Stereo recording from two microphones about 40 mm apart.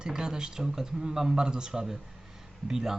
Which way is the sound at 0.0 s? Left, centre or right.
Centre.